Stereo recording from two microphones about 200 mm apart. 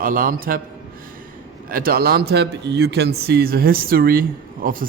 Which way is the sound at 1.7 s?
50° right (ahead or behind).